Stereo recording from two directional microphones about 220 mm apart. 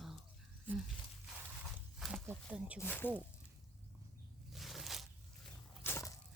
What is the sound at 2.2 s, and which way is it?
Snake, 5° right (ahead or behind).